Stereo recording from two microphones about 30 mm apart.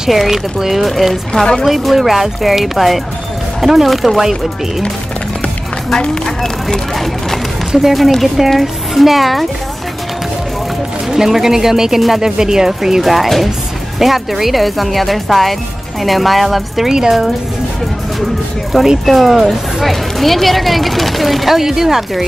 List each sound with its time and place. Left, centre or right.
0.1 s speech: centre
1.3 s speech: left
1.6 s speech: centre
6.2 s speech: centre
7.7 s speech: centre
11.1 s speech: centre
13.0 s speech: centre
18.7 s speech: centre